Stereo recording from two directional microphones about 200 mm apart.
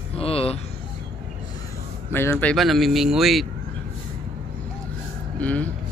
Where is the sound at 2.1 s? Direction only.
10° left (ahead or behind).